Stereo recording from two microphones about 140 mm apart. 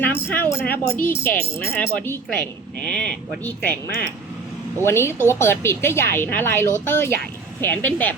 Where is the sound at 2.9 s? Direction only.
5° left (ahead or behind).